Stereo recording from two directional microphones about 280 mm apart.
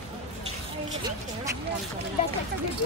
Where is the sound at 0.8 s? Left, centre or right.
Centre.